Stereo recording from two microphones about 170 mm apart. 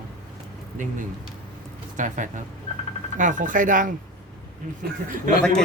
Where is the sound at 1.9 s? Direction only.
50° right (ahead or behind).